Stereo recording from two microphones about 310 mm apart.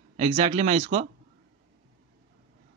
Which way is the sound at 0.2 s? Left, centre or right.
Right.